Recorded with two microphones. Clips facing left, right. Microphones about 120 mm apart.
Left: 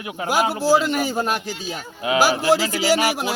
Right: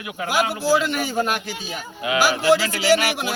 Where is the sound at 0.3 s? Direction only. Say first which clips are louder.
Left 2 dB; 40° left (ahead or behind).